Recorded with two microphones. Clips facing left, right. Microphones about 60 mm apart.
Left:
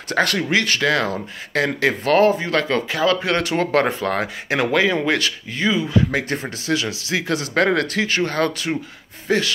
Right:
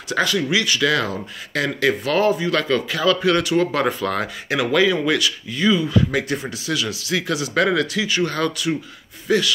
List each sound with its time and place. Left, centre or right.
0.1 s speech: left